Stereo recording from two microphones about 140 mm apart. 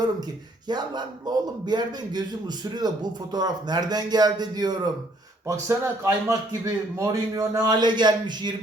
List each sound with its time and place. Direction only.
0.7 s a man's voice: 30° right (ahead or behind)